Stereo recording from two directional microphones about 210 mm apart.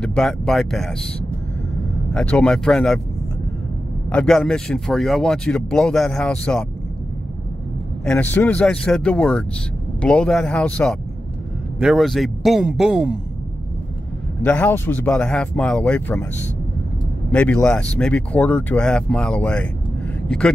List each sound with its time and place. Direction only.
0.0 s speech: 5° left (ahead or behind)
2.1 s speech: 5° left (ahead or behind)
4.1 s speech: 5° left (ahead or behind)
8.0 s speech: 5° left (ahead or behind)
14.4 s speech: 5° left (ahead or behind)
17.3 s speech: 5° left (ahead or behind)